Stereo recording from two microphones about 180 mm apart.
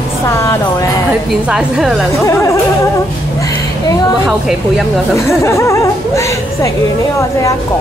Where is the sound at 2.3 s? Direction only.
15° left (ahead or behind).